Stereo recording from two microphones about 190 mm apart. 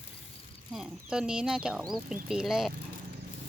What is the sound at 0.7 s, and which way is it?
Speech, 5° right (ahead or behind).